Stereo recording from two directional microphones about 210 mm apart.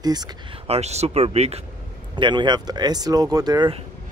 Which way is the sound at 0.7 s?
30° right (ahead or behind).